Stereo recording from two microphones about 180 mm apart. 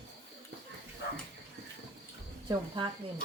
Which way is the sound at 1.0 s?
70° left (ahead or behind).